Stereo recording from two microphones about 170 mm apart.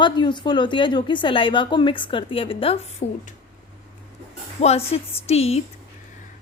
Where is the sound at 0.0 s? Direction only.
25° left (ahead or behind); by 3.2 s 40° left (ahead or behind).